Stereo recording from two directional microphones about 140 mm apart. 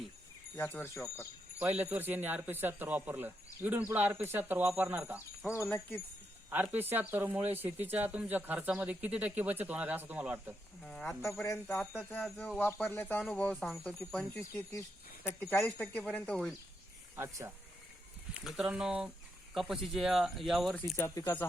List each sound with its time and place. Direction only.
0.5 s speech: 15° left (ahead or behind)
1.5 s a man's voice: 10° right (ahead or behind)
5.6 s speech: 20° left (ahead or behind)
6.5 s a man's voice: 15° right (ahead or behind)
10.8 s speech: 5° left (ahead or behind)
11.2 s speech: 20° left (ahead or behind); by 13.9 s 5° left (ahead or behind)
14.3 s speech: 20° left (ahead or behind)
17.2 s speech: 20° right (ahead or behind)
18.3 s a man's voice: 5° right (ahead or behind)
20.9 s speech: 20° left (ahead or behind)